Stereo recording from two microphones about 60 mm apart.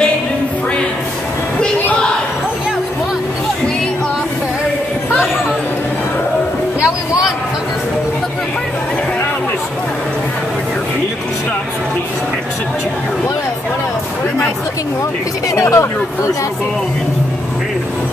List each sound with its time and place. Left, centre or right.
15.5 s speech: left